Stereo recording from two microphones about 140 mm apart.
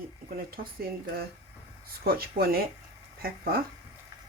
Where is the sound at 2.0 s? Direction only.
90° right.